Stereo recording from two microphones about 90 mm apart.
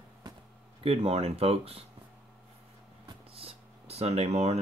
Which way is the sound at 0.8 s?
90° right.